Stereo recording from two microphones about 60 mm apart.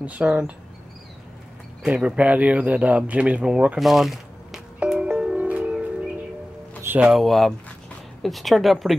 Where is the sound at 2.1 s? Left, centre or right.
Right.